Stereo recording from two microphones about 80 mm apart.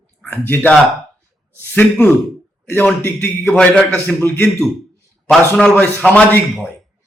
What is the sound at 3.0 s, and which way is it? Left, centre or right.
A man's voice, left.